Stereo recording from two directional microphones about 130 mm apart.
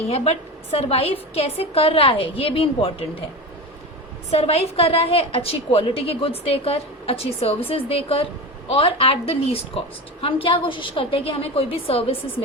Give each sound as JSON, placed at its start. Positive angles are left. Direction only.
{"t": 0.1, "sound": "a woman's voice", "side_deg": 50}
{"t": 4.3, "sound": "a woman's voice", "side_deg": 50}